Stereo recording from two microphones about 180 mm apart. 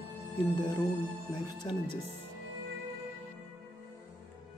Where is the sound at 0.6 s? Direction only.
25° left (ahead or behind).